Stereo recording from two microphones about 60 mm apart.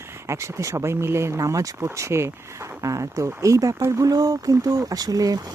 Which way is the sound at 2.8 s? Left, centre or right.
Right.